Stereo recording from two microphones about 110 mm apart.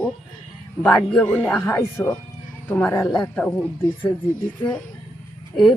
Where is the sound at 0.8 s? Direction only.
5° left (ahead or behind).